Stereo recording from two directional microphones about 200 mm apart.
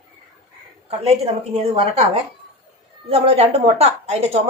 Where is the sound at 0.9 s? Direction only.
30° right (ahead or behind).